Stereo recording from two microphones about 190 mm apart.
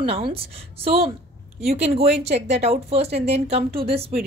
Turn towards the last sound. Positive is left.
turn(degrees=-30)  # may be behind; listen again after turning